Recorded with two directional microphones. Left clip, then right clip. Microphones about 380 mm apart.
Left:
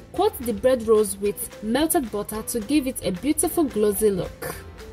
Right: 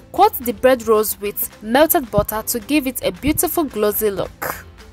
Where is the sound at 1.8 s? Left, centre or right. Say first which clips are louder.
Right 9 dB; right.